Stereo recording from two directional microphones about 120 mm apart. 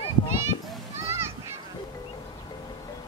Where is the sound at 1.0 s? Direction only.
20° right (ahead or behind).